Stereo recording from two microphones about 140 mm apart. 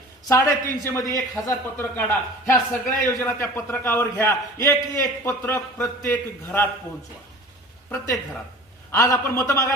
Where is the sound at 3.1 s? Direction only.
20° left (ahead or behind).